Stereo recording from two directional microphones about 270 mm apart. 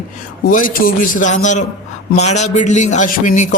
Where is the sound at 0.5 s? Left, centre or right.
Left.